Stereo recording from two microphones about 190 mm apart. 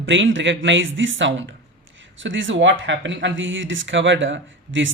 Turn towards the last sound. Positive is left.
turn(degrees=-80)